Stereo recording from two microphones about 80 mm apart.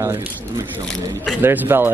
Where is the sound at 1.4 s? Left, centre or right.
Right.